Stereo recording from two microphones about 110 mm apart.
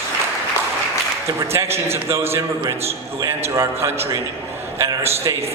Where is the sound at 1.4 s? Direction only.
20° right (ahead or behind).